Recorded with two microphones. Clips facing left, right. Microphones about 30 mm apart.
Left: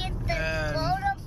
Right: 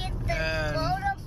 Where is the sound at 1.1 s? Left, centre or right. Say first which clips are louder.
Left 1 dB; centre.